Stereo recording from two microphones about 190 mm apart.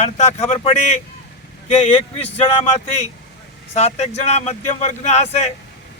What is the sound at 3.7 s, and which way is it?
Speech, 35° left (ahead or behind).